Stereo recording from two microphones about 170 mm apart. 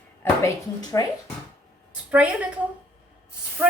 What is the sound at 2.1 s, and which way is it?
Speech, 5° right (ahead or behind).